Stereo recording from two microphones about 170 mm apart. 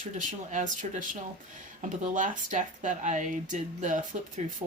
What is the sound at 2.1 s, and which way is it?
Speech, 50° right (ahead or behind).